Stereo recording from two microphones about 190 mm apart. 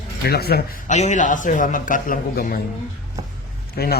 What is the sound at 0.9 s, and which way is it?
A man's voice, 40° left (ahead or behind).